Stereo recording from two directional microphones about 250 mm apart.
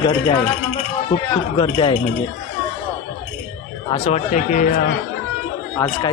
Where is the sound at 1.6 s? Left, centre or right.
Left.